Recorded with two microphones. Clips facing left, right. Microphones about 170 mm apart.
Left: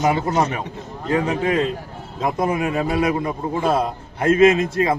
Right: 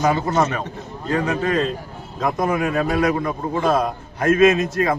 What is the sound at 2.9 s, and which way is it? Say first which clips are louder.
Speech: even; 10° left (ahead or behind).